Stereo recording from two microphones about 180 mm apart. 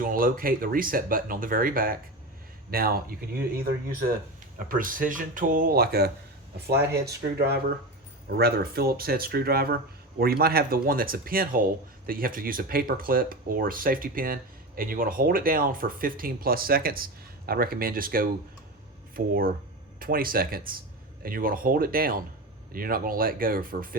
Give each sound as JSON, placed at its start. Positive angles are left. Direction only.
{"t": 0.0, "sound": "speech", "side_deg": -50}
{"t": 7.3, "sound": "speech", "side_deg": -60}